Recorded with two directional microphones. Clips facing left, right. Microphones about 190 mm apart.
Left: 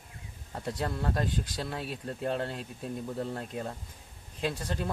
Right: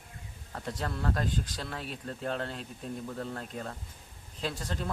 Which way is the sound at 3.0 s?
20° left (ahead or behind).